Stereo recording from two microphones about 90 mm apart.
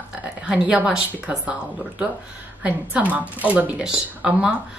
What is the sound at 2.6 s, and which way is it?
A woman's voice, 15° right (ahead or behind).